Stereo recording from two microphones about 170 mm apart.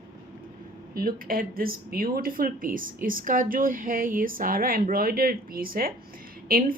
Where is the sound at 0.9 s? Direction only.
60° right (ahead or behind).